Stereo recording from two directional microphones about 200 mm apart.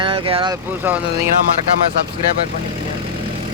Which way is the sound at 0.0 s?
25° right (ahead or behind).